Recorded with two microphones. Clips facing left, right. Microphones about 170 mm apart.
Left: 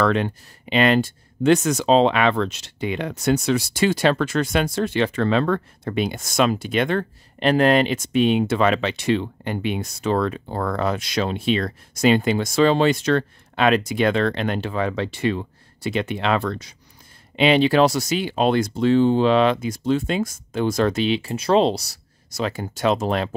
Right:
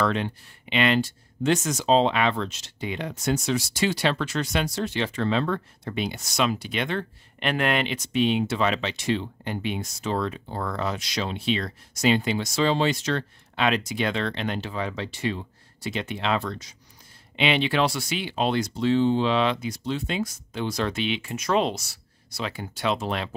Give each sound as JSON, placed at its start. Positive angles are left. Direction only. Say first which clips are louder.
{"t": 0.0, "sound": "speech", "louder": "left 5 dB", "side_deg": 60}
{"t": 0.7, "sound": "speech", "louder": "left 5 dB", "side_deg": 45}
{"t": 7.3, "sound": "speech", "louder": "left 8 dB", "side_deg": 35}
{"t": 17.4, "sound": "speech", "louder": "left 7 dB", "side_deg": 40}